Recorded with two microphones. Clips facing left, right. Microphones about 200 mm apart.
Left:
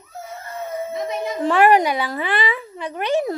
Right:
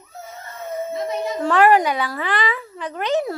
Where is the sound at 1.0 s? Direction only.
20° left (ahead or behind).